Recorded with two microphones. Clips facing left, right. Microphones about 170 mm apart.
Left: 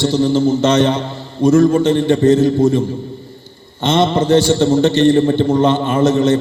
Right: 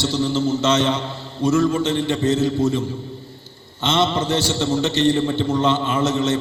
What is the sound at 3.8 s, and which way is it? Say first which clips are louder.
A man's voice: left 6 dB; 55° left (ahead or behind).